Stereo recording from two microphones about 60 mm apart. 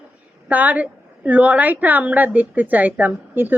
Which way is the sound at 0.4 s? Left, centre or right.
Right.